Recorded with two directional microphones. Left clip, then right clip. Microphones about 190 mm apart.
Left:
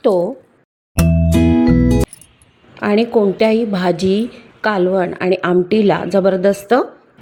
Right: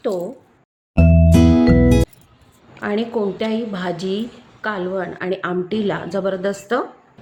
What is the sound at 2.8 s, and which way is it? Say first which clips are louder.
A woman's voice: left 7 dB; 35° left (ahead or behind).